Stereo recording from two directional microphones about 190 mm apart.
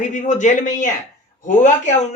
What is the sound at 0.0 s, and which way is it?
Speech, 40° left (ahead or behind).